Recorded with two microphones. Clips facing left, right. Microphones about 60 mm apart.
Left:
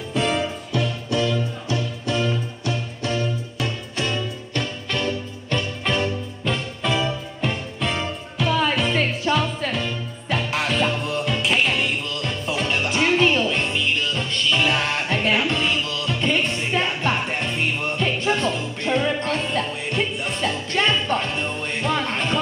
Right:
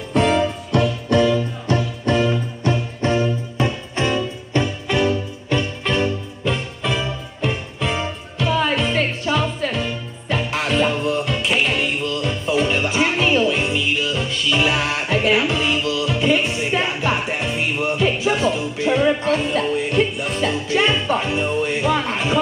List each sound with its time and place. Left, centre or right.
0.1 s music: right
1.1 s music: right
2.7 s music: right; by 22.4 s centre